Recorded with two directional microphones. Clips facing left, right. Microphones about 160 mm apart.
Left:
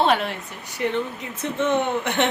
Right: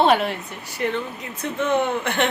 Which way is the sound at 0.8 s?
15° left (ahead or behind).